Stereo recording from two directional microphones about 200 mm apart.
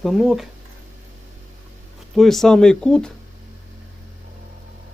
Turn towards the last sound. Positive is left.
turn(degrees=5)  # may be behind; listen again after turning